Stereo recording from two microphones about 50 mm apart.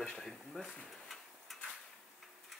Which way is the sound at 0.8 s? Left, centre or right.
Centre.